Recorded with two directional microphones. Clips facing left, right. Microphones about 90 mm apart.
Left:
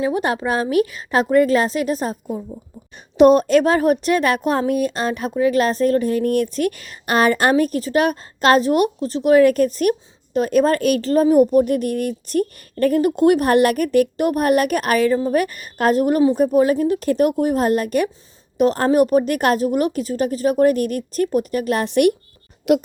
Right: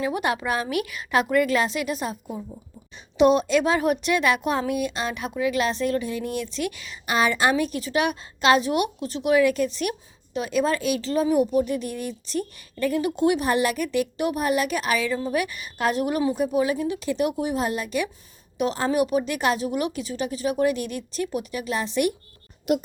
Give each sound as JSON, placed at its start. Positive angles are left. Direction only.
{"t": 0.0, "sound": "a woman's voice", "side_deg": 35}
{"t": 22.7, "sound": "speech", "side_deg": 80}